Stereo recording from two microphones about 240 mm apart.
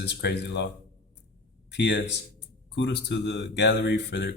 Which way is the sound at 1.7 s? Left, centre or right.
Left.